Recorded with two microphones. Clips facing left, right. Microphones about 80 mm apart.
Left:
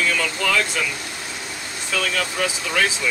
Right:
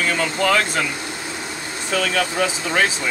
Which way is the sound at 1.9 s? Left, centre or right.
Right.